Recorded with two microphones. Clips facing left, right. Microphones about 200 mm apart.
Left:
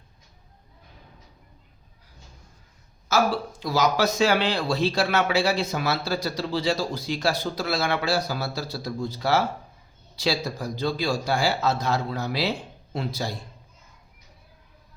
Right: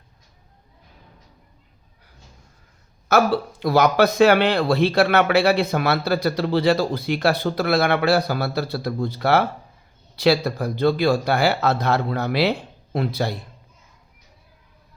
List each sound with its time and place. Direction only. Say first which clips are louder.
3.1 s a man's voice: right 5 dB; 60° right (ahead or behind)